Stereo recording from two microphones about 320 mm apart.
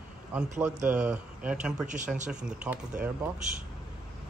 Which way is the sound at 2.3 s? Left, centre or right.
Centre.